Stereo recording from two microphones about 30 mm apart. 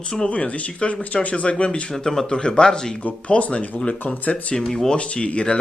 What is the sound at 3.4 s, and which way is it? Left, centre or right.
Speech, left.